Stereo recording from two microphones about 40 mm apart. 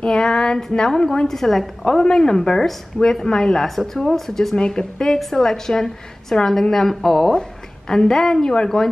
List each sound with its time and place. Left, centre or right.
0.0 s a woman's voice: centre
1.9 s a woman's voice: centre
4.6 s a woman's voice: left